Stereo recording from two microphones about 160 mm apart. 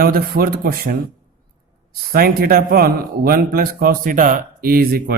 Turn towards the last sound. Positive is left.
turn(degrees=-70)  # may be behind; listen again after turning